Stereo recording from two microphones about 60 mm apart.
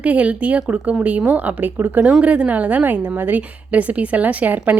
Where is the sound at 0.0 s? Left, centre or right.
Right.